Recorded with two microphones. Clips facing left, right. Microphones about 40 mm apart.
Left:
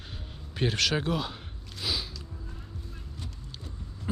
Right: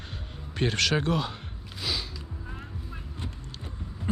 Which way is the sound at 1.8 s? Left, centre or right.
Centre.